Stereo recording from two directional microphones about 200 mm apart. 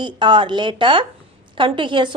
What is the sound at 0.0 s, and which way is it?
A woman's voice, 25° right (ahead or behind).